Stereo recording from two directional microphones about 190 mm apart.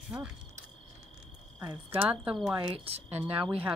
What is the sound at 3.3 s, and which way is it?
Speech, 10° right (ahead or behind).